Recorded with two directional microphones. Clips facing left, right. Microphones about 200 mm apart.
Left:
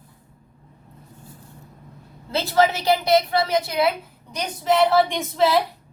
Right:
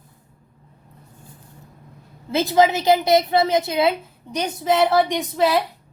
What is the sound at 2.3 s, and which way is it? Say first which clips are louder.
A woman's voice: right 3 dB; 15° right (ahead or behind).